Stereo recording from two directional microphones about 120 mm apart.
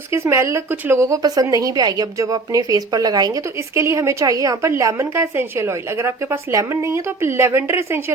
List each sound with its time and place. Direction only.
0.1 s a woman's voice: 20° right (ahead or behind)